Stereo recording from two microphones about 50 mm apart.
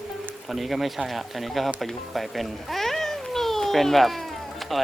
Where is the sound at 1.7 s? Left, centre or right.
Centre.